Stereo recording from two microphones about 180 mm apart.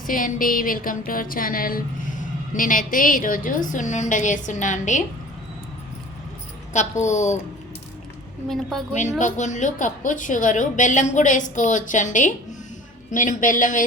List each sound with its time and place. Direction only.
0.1 s a woman's voice: 50° left (ahead or behind)
6.7 s a woman's voice: 40° left (ahead or behind)
8.4 s a woman's voice: centre (ahead or behind)
8.9 s a woman's voice: 40° left (ahead or behind)